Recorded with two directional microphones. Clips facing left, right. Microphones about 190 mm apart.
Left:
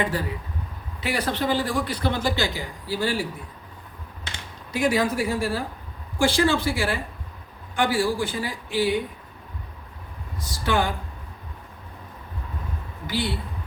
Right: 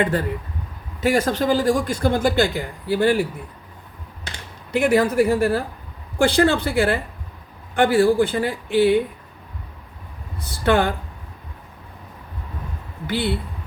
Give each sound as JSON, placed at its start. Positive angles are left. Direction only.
{"t": 0.0, "sound": "a man's voice", "side_deg": -55}
{"t": 1.0, "sound": "speech", "side_deg": -45}
{"t": 4.7, "sound": "a man's voice", "side_deg": -60}
{"t": 10.5, "sound": "a man's voice", "side_deg": -60}
{"t": 13.1, "sound": "a man's voice", "side_deg": -60}